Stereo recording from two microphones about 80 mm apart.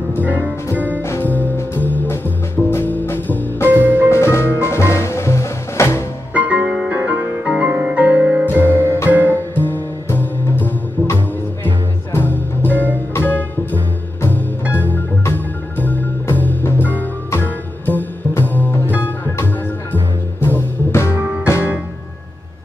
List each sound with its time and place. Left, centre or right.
0.2 s music: right
1.0 s music: left
3.7 s music: right
4.1 s music: left
6.3 s music: centre
9.3 s music: left
14.8 s music: left